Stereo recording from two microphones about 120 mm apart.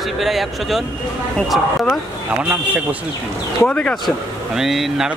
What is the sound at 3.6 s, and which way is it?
Speech, 10° left (ahead or behind).